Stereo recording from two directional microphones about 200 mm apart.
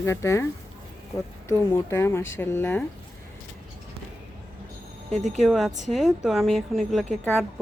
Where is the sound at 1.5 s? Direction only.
15° left (ahead or behind).